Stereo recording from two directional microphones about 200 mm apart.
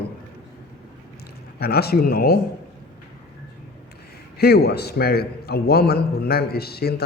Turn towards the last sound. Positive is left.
turn(degrees=50)  # may be behind; listen again after turning